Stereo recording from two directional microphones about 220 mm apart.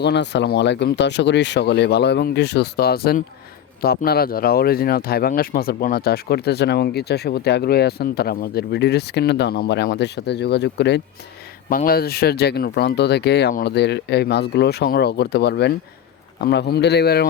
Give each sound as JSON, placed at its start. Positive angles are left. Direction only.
{"t": 0.0, "sound": "speech", "side_deg": 50}